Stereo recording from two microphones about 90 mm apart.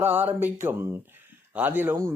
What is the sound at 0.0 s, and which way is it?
Speech, 20° right (ahead or behind).